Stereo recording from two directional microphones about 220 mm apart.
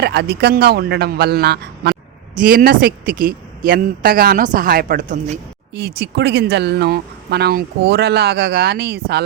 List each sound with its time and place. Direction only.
0.0 s speech: 50° right (ahead or behind)